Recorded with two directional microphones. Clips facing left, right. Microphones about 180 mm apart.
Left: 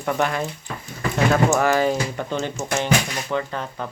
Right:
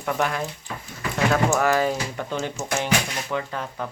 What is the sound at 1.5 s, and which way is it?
Speech, centre (ahead or behind).